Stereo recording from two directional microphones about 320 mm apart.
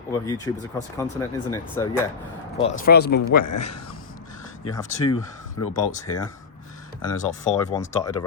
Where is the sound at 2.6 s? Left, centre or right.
Left.